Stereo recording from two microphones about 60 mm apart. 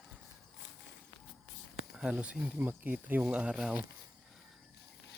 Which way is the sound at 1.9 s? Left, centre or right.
Centre.